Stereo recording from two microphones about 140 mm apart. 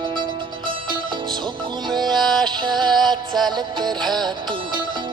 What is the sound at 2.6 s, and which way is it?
Music, 30° right (ahead or behind).